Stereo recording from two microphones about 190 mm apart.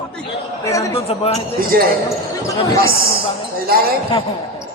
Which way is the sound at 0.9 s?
30° left (ahead or behind).